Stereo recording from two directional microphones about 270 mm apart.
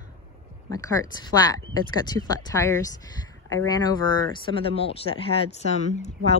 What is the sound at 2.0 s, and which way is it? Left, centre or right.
A woman's voice, centre.